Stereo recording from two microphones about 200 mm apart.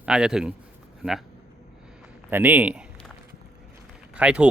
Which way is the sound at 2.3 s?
10° right (ahead or behind).